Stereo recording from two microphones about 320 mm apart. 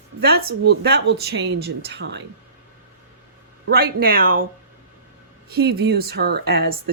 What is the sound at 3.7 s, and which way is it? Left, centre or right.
Speech, right.